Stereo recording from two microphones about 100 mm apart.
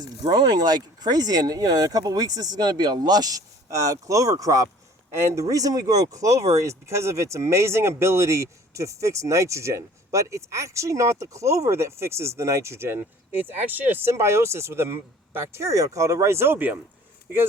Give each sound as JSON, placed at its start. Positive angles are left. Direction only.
{"t": 0.0, "sound": "speech", "side_deg": -45}